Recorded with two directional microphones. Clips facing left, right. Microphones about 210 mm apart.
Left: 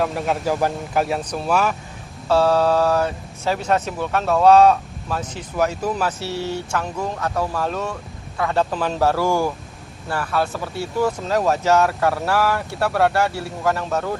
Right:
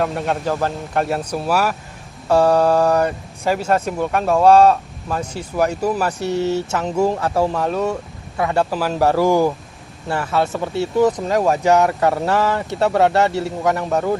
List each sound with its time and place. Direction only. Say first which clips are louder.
0.0 s speech: right 1 dB; centre (ahead or behind)
0.5 s a man's voice: even; 10° left (ahead or behind)
1.0 s speech: right 2 dB; 5° right (ahead or behind); by 7.7 s 25° right (ahead or behind)
8.4 s speech: right 1 dB; 10° right (ahead or behind)